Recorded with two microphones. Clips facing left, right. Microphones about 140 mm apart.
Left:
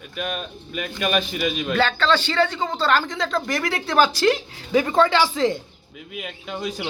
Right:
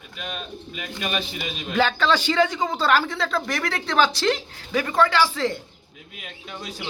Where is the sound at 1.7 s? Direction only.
10° right (ahead or behind); by 4.4 s 5° left (ahead or behind).